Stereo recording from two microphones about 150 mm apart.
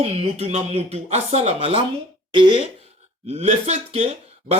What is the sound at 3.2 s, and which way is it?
Speech, 45° right (ahead or behind).